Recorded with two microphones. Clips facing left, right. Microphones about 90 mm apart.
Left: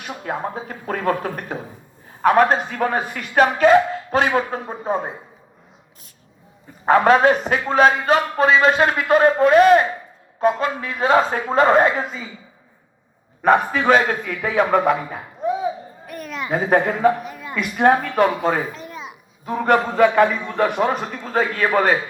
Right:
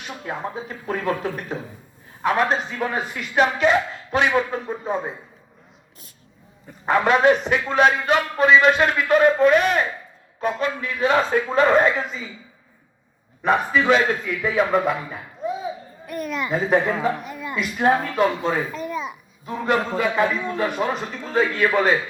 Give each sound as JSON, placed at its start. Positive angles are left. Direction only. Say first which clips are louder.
{"t": 0.2, "sound": "speech", "louder": "left 3 dB", "side_deg": 45}
{"t": 6.8, "sound": "speech", "louder": "left 3 dB", "side_deg": 40}
{"t": 13.4, "sound": "speech", "louder": "left 3 dB", "side_deg": 55}
{"t": 14.8, "sound": "laughter", "louder": "left 5 dB", "side_deg": 60}
{"t": 16.6, "sound": "speech", "louder": "left 4 dB", "side_deg": 50}
{"t": 17.5, "sound": "a man's voice", "louder": "left 3 dB", "side_deg": 60}
{"t": 19.5, "sound": "a man's voice", "louder": "left 4 dB", "side_deg": 55}